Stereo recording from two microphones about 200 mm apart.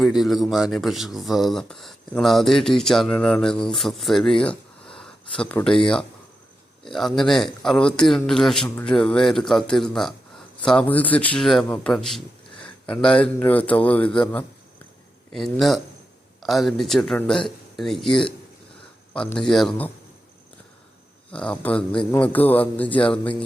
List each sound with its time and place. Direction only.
0.0 s speech: centre (ahead or behind)
21.3 s speech: 5° left (ahead or behind)